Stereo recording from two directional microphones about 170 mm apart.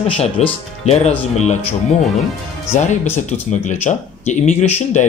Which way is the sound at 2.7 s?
45° left (ahead or behind).